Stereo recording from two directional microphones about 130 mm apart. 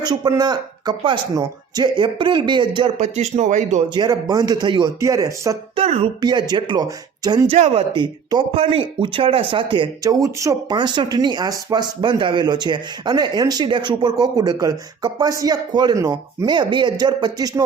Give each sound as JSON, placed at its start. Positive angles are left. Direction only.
{"t": 0.0, "sound": "speech", "side_deg": -30}
{"t": 3.0, "sound": "speech", "side_deg": -60}
{"t": 3.8, "sound": "speech", "side_deg": -30}
{"t": 5.7, "sound": "a sound", "side_deg": -50}
{"t": 6.2, "sound": "speech", "side_deg": -35}
{"t": 7.5, "sound": "speech", "side_deg": -50}
{"t": 16.5, "sound": "speech", "side_deg": -35}